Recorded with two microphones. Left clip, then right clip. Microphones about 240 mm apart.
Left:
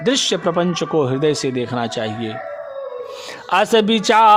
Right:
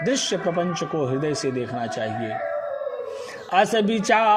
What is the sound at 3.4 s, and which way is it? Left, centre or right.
Speech, left.